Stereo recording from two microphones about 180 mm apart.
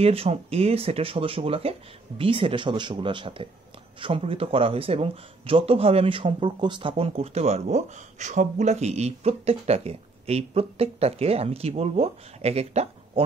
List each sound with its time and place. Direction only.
0.0 s speech: 35° right (ahead or behind)